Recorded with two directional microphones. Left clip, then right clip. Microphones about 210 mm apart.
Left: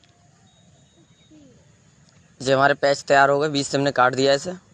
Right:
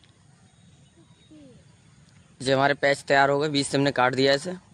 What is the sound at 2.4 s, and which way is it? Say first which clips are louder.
Speech: left 4 dB; 5° left (ahead or behind).